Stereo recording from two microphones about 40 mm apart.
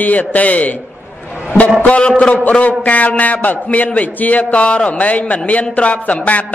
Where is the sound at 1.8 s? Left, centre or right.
Left.